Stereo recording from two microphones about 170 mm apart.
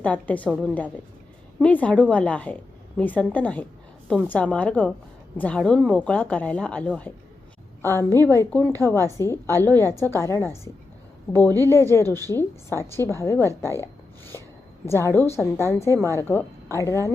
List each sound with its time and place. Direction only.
0.0 s a woman's voice: 10° left (ahead or behind)
11.3 s a woman's voice: 20° right (ahead or behind)
11.7 s a woman's voice: 15° left (ahead or behind)